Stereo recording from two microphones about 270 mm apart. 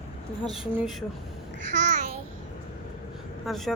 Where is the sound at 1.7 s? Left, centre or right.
Right.